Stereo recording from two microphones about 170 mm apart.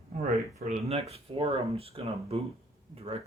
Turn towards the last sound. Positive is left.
turn(degrees=-35)  # may be behind; listen again after turning